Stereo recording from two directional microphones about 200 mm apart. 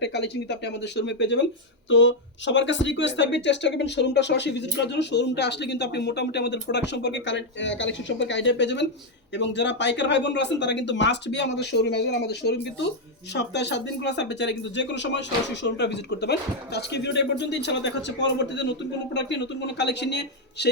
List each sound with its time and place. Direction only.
0.0 s speech: 60° left (ahead or behind)